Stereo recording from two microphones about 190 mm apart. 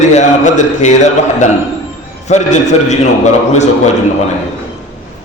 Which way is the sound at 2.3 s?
35° left (ahead or behind).